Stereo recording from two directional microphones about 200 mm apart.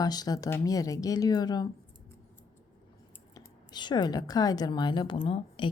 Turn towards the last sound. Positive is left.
turn(degrees=25)  # may be behind; listen again after turning